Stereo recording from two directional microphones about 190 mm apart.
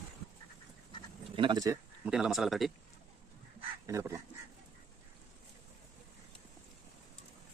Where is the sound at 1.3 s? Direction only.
25° right (ahead or behind).